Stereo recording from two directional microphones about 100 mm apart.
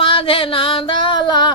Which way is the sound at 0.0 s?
65° left (ahead or behind).